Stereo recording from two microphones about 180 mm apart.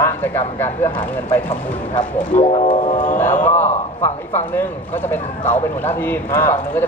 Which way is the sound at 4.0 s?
10° left (ahead or behind).